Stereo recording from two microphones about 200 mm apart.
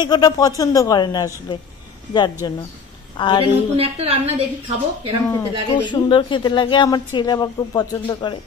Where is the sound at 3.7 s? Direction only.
30° right (ahead or behind).